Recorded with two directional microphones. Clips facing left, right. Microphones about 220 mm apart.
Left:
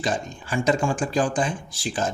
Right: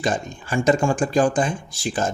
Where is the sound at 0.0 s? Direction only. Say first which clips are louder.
Right 3 dB; 50° right (ahead or behind).